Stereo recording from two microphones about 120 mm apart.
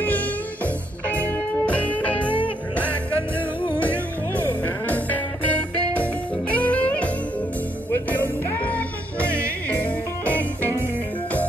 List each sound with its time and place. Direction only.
0.0 s music: 15° left (ahead or behind)
1.7 s music: 10° left (ahead or behind)
3.8 s music: 15° left (ahead or behind)
9.2 s music: 20° right (ahead or behind)
9.7 s music: 15° left (ahead or behind)